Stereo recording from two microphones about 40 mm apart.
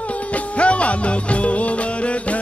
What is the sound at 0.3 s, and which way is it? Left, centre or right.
Music, left.